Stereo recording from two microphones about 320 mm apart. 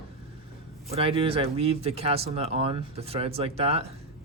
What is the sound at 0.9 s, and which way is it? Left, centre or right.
Speech, centre.